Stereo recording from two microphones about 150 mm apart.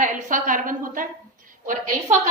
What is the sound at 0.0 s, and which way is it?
A woman's voice, 60° right (ahead or behind).